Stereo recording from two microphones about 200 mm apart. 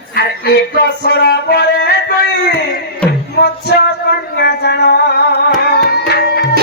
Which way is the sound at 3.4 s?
55° left (ahead or behind).